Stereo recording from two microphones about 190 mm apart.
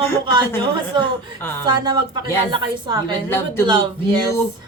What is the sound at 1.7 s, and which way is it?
A woman's voice, 25° right (ahead or behind).